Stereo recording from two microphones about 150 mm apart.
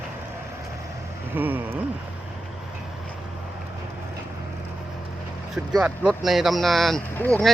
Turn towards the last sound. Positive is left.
turn(degrees=5)  # may be behind; listen again after turning